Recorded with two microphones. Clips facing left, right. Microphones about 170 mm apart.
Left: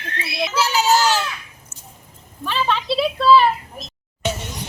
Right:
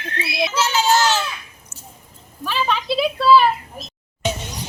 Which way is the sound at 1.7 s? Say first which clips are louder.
Right 5 dB; 5° left (ahead or behind).